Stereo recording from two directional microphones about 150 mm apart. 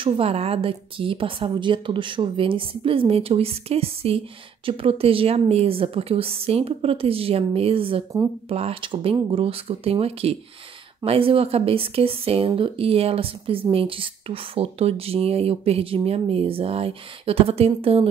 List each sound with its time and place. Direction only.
0.0 s speech: 40° right (ahead or behind)